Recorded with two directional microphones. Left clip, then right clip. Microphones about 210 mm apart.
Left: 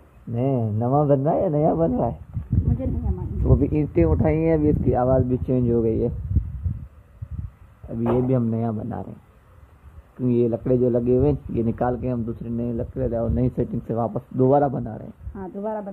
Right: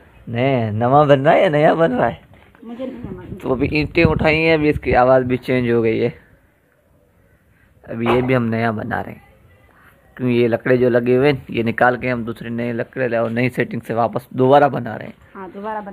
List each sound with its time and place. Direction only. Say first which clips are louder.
0.3 s speech: right 7 dB; 10° right (ahead or behind)
3.5 s speech: right 5 dB; centre (ahead or behind)
4.9 s speech: right 10 dB; 15° right (ahead or behind)
5.3 s speech: right 5 dB; 5° right (ahead or behind)
7.9 s speech: right 6 dB; 10° right (ahead or behind)
10.1 s speech: right 5 dB; 5° right (ahead or behind)
14.1 s speech: right 4 dB; 20° right (ahead or behind)
15.3 s speech: right 2 dB; 35° left (ahead or behind)